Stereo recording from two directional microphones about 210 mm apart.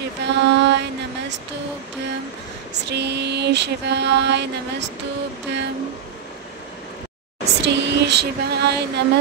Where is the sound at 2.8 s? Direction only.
55° right (ahead or behind).